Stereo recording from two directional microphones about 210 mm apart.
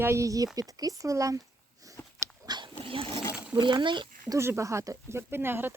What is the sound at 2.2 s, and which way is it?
Roaring cats, 20° right (ahead or behind).